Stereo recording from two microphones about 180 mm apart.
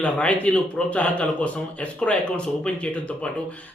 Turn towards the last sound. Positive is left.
turn(degrees=5)  # may be behind; listen again after turning